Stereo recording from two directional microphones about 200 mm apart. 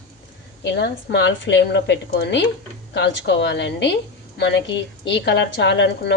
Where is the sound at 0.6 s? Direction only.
60° left (ahead or behind).